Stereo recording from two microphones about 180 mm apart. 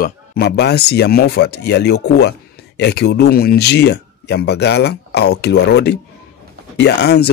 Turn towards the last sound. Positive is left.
turn(degrees=65)  # may be behind; listen again after turning